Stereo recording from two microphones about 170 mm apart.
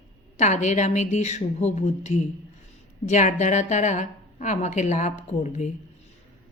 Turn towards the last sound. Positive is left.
turn(degrees=45)  # may be behind; listen again after turning